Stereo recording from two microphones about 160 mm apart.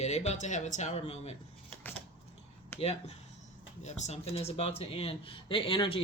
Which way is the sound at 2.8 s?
40° left (ahead or behind).